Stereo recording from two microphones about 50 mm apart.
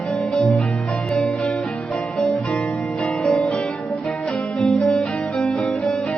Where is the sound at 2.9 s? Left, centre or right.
Left.